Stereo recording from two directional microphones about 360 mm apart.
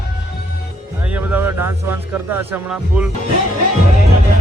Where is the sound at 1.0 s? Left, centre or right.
Centre.